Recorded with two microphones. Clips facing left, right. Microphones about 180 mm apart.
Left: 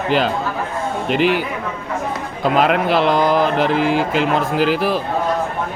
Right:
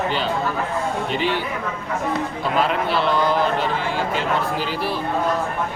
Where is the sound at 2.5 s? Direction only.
80° left.